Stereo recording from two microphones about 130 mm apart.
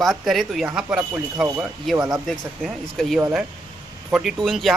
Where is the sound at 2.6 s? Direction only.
Centre (ahead or behind).